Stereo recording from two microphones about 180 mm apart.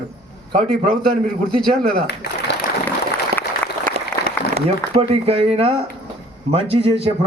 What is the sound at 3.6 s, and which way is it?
Applause, 10° left (ahead or behind).